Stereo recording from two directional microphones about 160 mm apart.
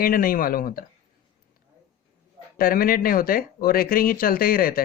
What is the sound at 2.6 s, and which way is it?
Speech, 65° left (ahead or behind).